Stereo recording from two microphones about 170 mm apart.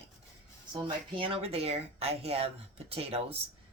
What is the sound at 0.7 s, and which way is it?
Speech, 30° right (ahead or behind).